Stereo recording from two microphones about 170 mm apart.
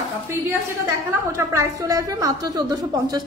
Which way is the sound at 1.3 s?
15° right (ahead or behind).